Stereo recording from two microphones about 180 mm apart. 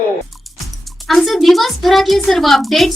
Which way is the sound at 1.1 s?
Centre (ahead or behind).